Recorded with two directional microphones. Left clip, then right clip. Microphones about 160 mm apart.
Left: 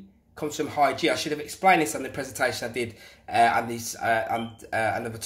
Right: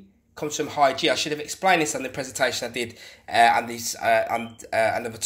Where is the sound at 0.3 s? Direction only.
10° left (ahead or behind).